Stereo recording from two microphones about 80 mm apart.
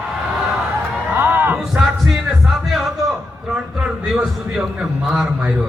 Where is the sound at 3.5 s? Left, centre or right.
Centre.